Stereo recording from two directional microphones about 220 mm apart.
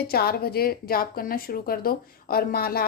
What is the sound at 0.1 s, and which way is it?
A woman's voice, 45° left (ahead or behind).